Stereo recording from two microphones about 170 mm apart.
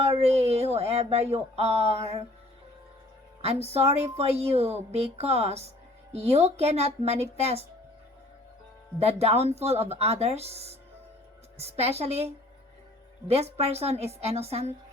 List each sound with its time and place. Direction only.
0.2 s a woman's voice: 40° right (ahead or behind)
3.4 s a woman's voice: 40° right (ahead or behind)
9.0 s a woman's voice: 40° right (ahead or behind)